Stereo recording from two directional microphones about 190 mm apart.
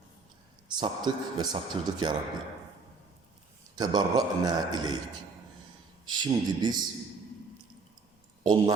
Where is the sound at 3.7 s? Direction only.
20° right (ahead or behind).